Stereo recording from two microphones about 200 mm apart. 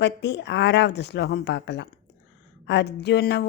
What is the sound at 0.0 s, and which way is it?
Speech, 60° left (ahead or behind).